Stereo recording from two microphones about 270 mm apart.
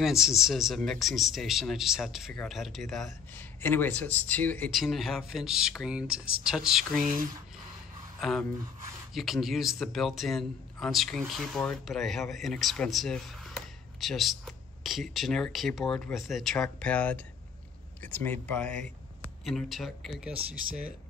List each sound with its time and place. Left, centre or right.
0.0 s a man's voice: centre
7.0 s speech: right
8.2 s a man's voice: centre